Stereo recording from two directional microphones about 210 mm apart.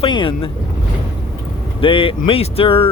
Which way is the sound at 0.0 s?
25° left (ahead or behind).